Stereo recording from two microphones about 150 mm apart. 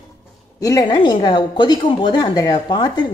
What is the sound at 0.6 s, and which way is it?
A woman's voice, 25° left (ahead or behind).